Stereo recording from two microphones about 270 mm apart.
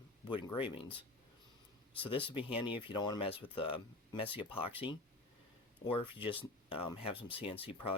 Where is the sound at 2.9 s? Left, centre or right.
Centre.